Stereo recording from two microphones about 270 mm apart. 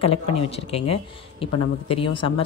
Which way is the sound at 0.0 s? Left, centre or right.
Left.